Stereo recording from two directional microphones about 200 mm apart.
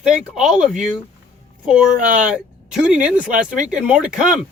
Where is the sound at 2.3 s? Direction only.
5° right (ahead or behind).